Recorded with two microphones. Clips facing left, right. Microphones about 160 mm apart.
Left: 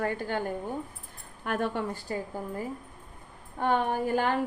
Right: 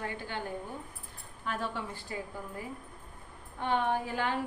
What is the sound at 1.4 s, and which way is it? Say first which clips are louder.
A woman's voice: left 6 dB; 55° left (ahead or behind).